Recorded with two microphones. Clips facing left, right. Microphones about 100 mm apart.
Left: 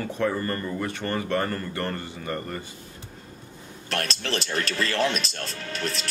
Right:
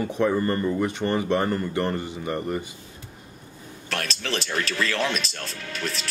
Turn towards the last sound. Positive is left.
turn(degrees=35)  # may be behind; listen again after turning